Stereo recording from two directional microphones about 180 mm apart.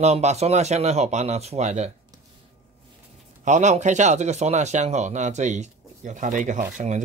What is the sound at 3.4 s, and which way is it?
Speech, 40° right (ahead or behind).